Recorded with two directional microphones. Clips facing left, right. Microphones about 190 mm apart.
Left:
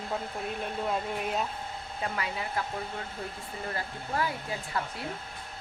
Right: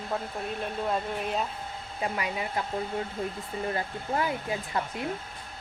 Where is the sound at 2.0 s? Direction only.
15° right (ahead or behind).